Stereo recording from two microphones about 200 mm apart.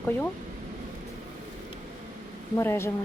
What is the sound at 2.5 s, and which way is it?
Speech, 15° left (ahead or behind).